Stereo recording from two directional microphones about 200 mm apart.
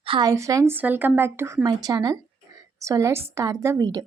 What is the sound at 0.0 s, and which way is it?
A woman's voice, 25° right (ahead or behind).